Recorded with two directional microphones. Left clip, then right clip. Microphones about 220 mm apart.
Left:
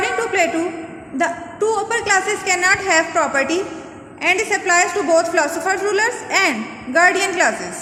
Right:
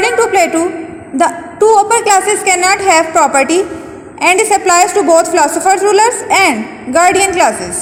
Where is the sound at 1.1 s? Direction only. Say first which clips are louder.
Right 8 dB; 20° right (ahead or behind).